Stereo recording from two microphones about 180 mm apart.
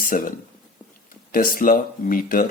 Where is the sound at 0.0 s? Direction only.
50° left (ahead or behind).